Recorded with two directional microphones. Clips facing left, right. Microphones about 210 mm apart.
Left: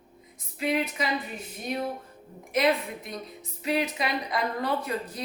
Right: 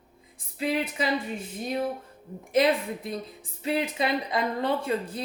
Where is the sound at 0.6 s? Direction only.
30° right (ahead or behind).